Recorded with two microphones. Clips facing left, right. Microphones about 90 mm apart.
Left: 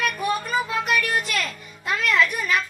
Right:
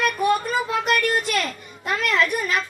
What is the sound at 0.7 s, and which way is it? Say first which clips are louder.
A child's voice: right 5 dB; 55° right (ahead or behind).